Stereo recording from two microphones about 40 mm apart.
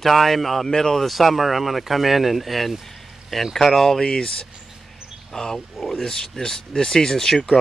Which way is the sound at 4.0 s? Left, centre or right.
Centre.